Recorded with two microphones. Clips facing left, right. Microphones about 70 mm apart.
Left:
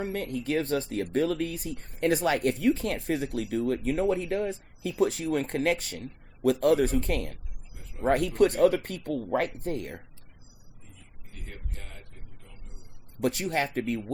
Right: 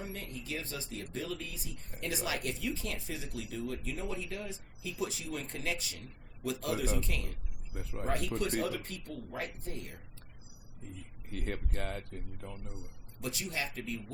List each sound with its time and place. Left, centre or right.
0.0 s speech: left
7.7 s speech: right
8.0 s speech: left
11.3 s speech: right
13.1 s speech: left